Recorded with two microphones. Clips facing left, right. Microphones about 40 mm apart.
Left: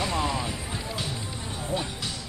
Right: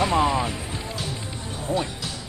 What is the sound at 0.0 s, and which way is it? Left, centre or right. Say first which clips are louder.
Music: right 7 dB; right.